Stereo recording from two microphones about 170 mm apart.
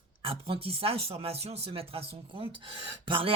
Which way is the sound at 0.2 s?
30° right (ahead or behind).